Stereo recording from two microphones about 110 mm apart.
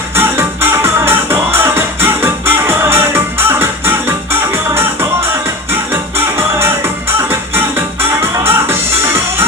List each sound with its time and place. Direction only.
0.2 s music: 20° right (ahead or behind)